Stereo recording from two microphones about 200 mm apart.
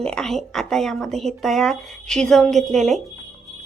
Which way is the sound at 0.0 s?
5° left (ahead or behind).